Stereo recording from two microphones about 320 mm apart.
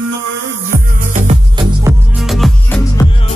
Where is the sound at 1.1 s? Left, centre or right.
Right.